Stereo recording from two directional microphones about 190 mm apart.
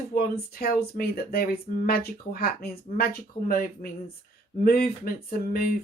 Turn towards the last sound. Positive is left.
turn(degrees=50)  # may be behind; listen again after turning